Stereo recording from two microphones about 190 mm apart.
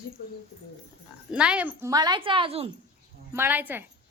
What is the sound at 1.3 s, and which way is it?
A woman's voice, 5° right (ahead or behind).